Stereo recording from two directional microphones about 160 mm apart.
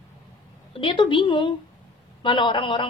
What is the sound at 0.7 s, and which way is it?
A woman's voice, 30° left (ahead or behind).